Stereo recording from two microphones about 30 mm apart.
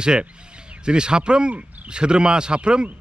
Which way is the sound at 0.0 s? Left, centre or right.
Right.